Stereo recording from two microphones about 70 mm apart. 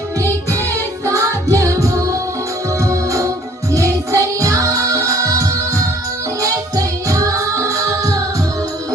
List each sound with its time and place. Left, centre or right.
0.2 s music: right